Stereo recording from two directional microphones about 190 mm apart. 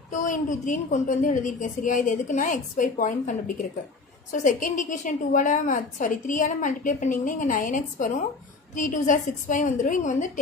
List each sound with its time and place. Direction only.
0.1 s a woman's voice: 40° left (ahead or behind)